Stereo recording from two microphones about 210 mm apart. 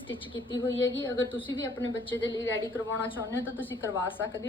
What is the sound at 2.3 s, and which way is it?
Speech, 10° left (ahead or behind).